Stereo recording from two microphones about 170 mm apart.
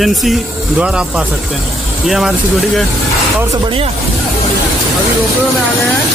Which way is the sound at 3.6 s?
30° right (ahead or behind).